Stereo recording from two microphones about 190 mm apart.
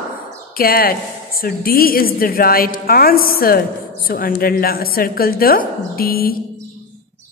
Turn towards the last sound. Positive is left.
turn(degrees=50)  # may be behind; listen again after turning